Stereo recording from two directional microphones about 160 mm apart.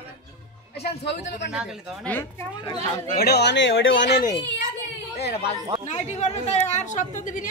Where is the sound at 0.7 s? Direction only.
90° left.